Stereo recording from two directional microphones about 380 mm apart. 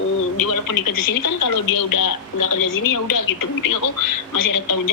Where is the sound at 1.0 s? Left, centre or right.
Left.